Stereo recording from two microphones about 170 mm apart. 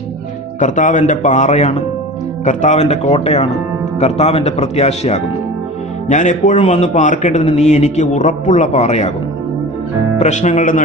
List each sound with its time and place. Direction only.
0.6 s a man's voice: 50° left (ahead or behind)
10.1 s a man's voice: 45° left (ahead or behind)